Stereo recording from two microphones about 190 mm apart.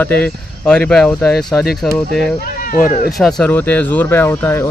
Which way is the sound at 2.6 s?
45° left (ahead or behind).